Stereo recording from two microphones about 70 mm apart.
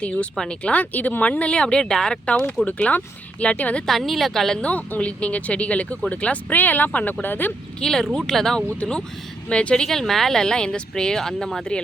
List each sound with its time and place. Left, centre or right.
0.0 s speech: centre
2.6 s speech: left
3.8 s speech: centre
4.6 s speech: centre
7.8 s speech: centre